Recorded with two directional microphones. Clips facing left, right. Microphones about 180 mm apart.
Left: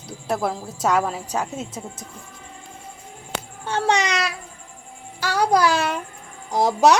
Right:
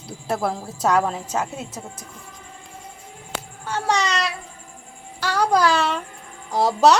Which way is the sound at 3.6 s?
25° left (ahead or behind).